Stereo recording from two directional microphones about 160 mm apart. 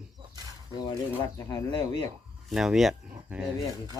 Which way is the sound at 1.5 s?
30° left (ahead or behind).